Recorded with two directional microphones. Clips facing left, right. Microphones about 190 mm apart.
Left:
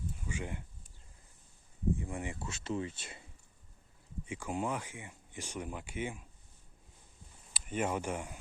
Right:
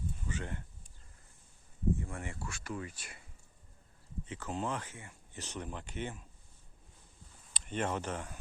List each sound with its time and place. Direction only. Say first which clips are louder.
0.3 s speech: left 1 dB; 10° left (ahead or behind)
2.0 s speech: left 2 dB; 15° left (ahead or behind)
4.3 s speech: left 2 dB; 10° left (ahead or behind)
7.5 s speech: left 1 dB; 10° left (ahead or behind)